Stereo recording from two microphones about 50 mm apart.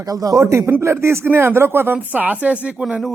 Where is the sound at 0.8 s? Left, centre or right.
Right.